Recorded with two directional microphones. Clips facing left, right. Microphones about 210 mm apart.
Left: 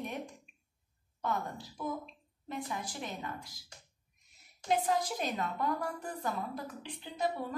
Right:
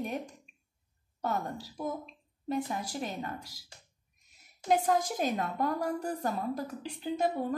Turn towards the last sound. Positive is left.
turn(degrees=-40)  # may be behind; listen again after turning